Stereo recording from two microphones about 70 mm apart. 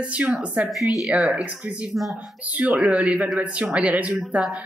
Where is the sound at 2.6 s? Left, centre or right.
Centre.